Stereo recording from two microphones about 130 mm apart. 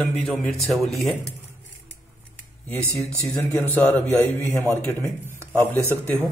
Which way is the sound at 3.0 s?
20° left (ahead or behind).